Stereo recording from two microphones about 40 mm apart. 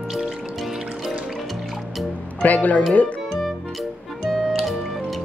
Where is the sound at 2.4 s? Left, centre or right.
Left.